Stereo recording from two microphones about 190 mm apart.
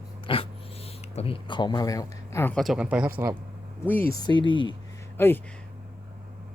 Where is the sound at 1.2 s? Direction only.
25° left (ahead or behind).